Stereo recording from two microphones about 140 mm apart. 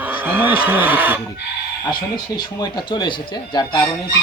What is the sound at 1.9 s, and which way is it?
Speech, 30° left (ahead or behind).